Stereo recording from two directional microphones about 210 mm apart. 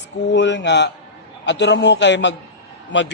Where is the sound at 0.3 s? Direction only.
55° left (ahead or behind).